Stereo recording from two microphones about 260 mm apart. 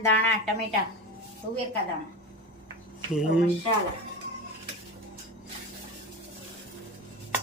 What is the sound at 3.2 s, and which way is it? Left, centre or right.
Speech, centre.